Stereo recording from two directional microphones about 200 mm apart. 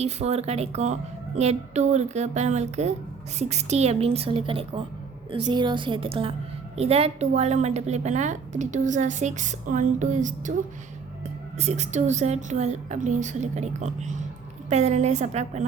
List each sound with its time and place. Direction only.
0.0 s a woman's voice: 30° right (ahead or behind)
11.5 s a woman's voice: 35° right (ahead or behind)